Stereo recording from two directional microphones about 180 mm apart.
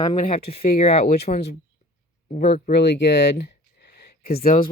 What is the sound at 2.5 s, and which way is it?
Speech, 35° left (ahead or behind).